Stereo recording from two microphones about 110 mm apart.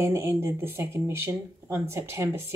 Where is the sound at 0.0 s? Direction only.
25° right (ahead or behind).